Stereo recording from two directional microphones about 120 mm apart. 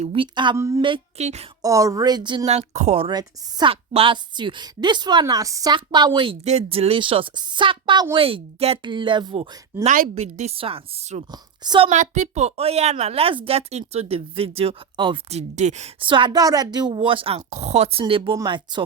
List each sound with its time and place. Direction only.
0.0 s a woman's voice: 50° right (ahead or behind)
0.5 s a woman's voice: 25° right (ahead or behind)
0.8 s a woman's voice: 45° right (ahead or behind)
1.2 s speech: 70° right (ahead or behind)
1.6 s a woman's voice: 30° right (ahead or behind)
2.5 s speech: 65° right (ahead or behind)
3.1 s a woman's voice: 40° right (ahead or behind)
6.4 s a woman's voice: 65° right (ahead or behind); by 9.5 s 45° right (ahead or behind)
9.8 s speech: 75° right (ahead or behind)
11.3 s a woman's voice: 35° right (ahead or behind)
11.9 s speech: 85° right; by 15.2 s 45° right (ahead or behind)
15.3 s speech: 70° right (ahead or behind)
16.0 s a woman's voice: 45° right (ahead or behind); by 18.0 s 60° right (ahead or behind)
18.4 s a woman's voice: 40° right (ahead or behind)